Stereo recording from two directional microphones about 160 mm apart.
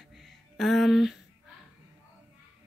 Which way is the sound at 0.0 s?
Centre (ahead or behind).